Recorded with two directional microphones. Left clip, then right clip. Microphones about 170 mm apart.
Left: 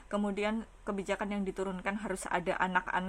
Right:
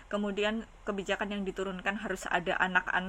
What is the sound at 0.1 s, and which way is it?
A woman's voice, 30° left (ahead or behind).